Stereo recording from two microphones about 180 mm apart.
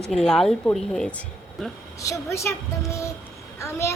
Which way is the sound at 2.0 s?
15° left (ahead or behind).